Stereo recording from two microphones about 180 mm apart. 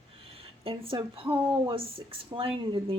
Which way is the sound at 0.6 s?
30° right (ahead or behind).